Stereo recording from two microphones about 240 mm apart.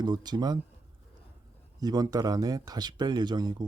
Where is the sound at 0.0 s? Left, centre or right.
Centre.